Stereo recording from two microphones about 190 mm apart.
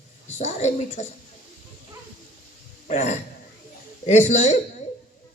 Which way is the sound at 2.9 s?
35° left (ahead or behind).